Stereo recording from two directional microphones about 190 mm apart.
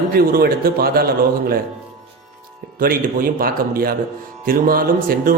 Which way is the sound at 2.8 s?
50° right (ahead or behind).